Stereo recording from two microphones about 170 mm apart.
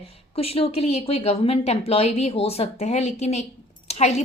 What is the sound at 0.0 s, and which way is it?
Speech, 35° left (ahead or behind).